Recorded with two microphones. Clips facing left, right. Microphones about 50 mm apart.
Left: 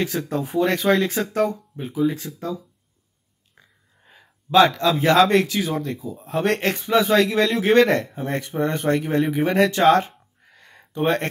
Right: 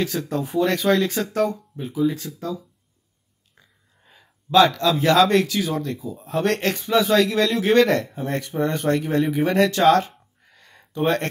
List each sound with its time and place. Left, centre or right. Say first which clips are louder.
0.0 s speech: even; centre
3.6 s a sound: left 2 dB; left
4.1 s speech: even; left